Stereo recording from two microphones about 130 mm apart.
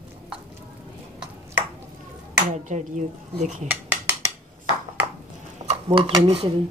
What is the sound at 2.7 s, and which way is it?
Speech, 70° right (ahead or behind).